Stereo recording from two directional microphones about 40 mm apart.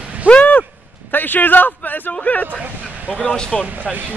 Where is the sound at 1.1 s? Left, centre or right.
Left.